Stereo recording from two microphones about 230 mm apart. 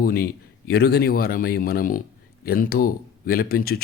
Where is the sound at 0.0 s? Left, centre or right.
Left.